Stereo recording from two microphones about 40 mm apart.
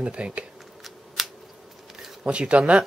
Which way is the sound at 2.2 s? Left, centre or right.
Right.